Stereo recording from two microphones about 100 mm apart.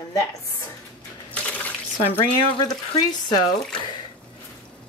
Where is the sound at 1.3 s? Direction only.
15° left (ahead or behind).